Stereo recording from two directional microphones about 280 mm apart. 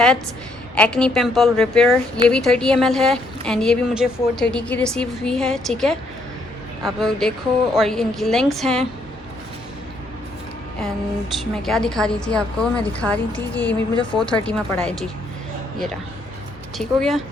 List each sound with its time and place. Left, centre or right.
0.8 s a woman's voice: centre
11.3 s a woman's voice: centre
16.7 s a woman's voice: centre